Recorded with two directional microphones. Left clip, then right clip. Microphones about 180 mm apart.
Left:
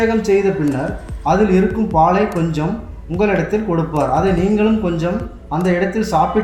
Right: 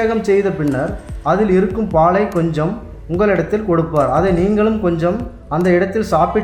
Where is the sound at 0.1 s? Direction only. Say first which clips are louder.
Even; 50° right (ahead or behind).